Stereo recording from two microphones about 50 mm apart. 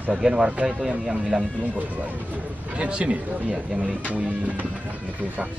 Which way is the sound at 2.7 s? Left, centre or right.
Right.